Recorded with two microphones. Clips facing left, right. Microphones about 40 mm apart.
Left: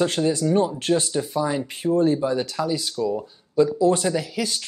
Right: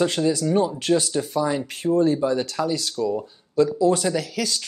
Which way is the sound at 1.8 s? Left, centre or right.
Centre.